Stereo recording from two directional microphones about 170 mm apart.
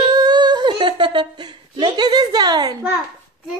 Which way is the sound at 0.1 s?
25° right (ahead or behind).